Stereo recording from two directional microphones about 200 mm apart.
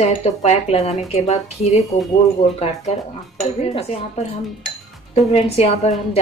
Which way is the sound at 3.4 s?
30° left (ahead or behind).